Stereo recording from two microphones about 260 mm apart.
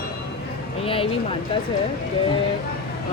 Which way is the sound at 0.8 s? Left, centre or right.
Left.